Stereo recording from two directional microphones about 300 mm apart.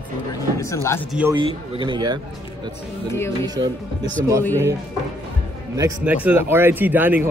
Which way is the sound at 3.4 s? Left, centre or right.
Centre.